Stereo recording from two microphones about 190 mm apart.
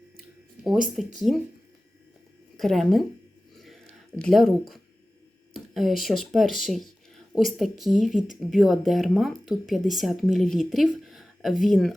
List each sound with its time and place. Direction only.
1.0 s speech: centre (ahead or behind)
2.6 s speech: centre (ahead or behind)
4.2 s speech: centre (ahead or behind)
5.5 s a sound: centre (ahead or behind)
6.0 s speech: centre (ahead or behind)